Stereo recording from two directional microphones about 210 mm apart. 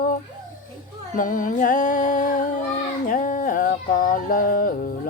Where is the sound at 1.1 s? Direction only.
40° left (ahead or behind).